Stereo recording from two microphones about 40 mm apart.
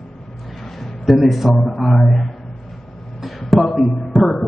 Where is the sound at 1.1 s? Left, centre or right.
Centre.